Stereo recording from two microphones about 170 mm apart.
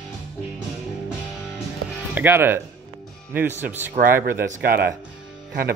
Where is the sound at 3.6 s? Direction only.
10° right (ahead or behind).